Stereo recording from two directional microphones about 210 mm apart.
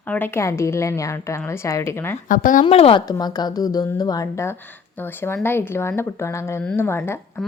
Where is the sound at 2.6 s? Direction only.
25° left (ahead or behind).